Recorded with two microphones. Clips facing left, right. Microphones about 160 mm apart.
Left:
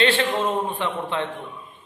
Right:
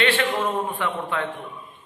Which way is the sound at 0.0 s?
25° left (ahead or behind).